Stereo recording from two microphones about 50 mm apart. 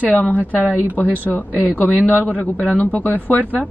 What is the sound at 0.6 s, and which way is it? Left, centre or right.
Speech, right.